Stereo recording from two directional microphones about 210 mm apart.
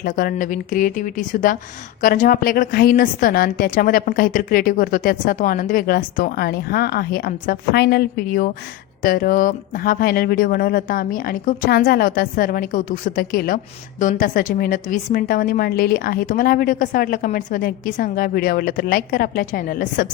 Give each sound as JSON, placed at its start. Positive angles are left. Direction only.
{"t": 0.0, "sound": "a woman's voice", "side_deg": 45}